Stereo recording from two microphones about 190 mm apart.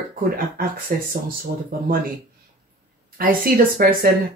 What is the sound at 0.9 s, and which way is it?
Speech, 50° right (ahead or behind).